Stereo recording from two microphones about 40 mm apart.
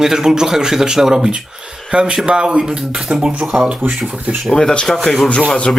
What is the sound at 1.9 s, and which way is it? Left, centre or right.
Speech, right.